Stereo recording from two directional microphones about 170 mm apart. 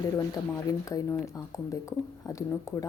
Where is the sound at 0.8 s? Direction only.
20° left (ahead or behind).